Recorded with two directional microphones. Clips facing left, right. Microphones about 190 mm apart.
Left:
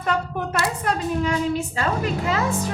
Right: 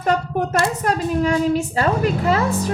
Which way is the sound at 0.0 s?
40° right (ahead or behind).